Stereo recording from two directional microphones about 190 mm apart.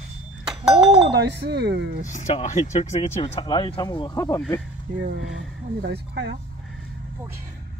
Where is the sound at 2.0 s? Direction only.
40° left (ahead or behind); by 4.6 s 15° left (ahead or behind).